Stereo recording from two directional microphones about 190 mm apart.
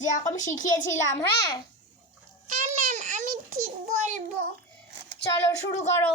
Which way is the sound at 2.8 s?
40° right (ahead or behind).